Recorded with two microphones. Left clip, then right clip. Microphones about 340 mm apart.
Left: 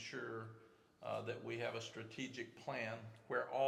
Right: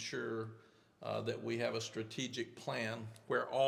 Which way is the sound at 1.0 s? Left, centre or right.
Right.